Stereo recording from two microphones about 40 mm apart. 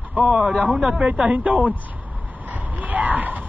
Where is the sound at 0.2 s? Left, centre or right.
Right.